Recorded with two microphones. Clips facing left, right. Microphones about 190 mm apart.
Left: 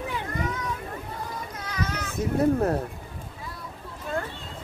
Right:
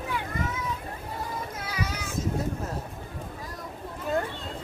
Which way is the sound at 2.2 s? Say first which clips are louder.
Left 9 dB; 60° left (ahead or behind).